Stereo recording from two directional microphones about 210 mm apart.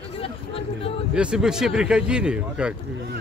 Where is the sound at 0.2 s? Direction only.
25° left (ahead or behind).